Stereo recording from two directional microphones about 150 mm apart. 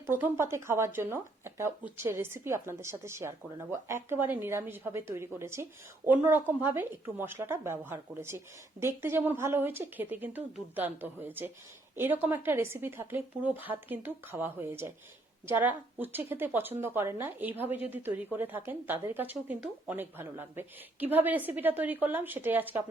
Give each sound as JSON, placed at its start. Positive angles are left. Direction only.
{"t": 0.0, "sound": "speech", "side_deg": -15}